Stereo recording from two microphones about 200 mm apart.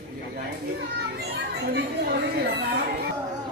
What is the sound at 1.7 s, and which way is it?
Speech, 55° right (ahead or behind).